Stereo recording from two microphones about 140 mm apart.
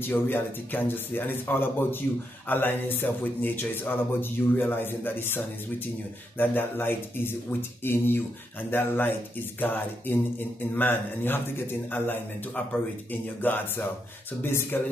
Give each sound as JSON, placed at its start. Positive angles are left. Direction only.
{"t": 0.0, "sound": "speech", "side_deg": 15}